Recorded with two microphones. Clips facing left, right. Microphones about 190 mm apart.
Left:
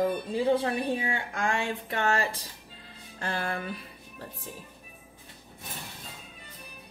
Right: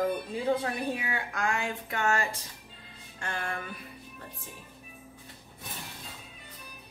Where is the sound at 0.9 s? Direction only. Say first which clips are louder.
Left 3 dB; 30° left (ahead or behind).